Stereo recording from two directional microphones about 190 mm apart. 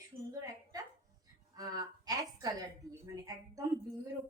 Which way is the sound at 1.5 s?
20° right (ahead or behind).